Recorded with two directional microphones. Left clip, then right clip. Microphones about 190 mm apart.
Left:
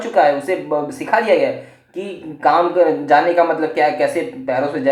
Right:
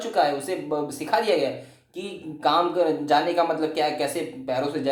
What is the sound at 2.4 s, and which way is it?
A man's voice, 40° right (ahead or behind).